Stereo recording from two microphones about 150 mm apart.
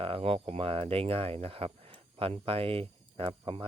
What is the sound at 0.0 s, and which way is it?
Speech, 40° right (ahead or behind).